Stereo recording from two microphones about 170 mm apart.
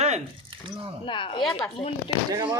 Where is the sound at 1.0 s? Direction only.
30° left (ahead or behind).